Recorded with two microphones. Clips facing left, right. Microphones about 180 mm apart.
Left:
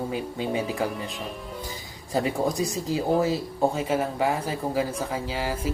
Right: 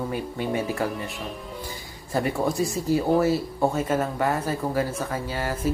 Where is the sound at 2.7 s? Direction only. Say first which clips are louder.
Right 3 dB; 15° left (ahead or behind).